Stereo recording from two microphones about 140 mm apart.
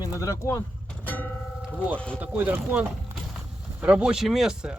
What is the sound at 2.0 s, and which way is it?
Speech, 10° left (ahead or behind).